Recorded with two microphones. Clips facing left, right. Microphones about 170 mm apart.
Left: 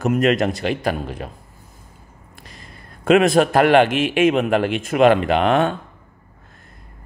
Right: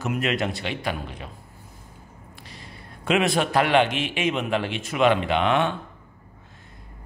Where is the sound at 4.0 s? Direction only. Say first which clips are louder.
Left 9 dB; 50° left (ahead or behind).